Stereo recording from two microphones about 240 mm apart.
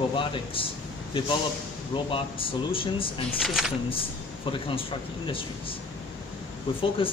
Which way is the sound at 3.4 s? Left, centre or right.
Centre.